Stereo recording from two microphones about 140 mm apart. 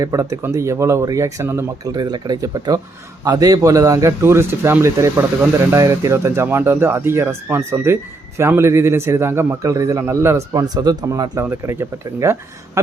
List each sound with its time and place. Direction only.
0.0 s a man's voice: 25° right (ahead or behind)